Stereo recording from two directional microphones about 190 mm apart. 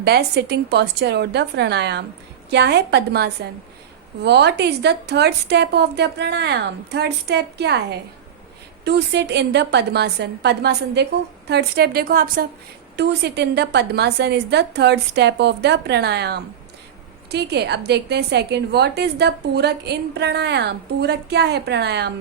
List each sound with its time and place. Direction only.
0.0 s a woman's voice: 60° right (ahead or behind)